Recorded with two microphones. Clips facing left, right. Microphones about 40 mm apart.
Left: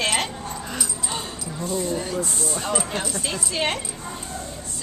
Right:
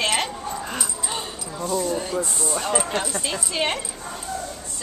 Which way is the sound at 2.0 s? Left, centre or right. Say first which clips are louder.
Right 1 dB; centre.